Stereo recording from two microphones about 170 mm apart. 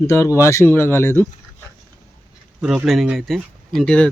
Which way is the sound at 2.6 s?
5° right (ahead or behind).